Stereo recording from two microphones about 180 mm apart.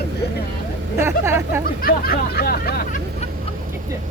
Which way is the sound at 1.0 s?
15° right (ahead or behind).